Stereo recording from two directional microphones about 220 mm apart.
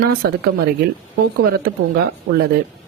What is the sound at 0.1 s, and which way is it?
Speech, 45° right (ahead or behind).